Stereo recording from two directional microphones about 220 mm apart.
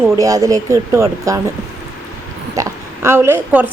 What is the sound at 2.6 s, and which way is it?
A woman's voice, 15° right (ahead or behind).